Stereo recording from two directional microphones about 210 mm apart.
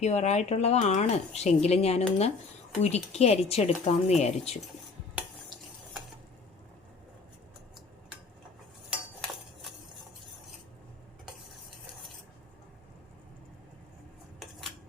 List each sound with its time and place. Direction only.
0.0 s speech: 30° left (ahead or behind)
8.9 s cutlery: centre (ahead or behind)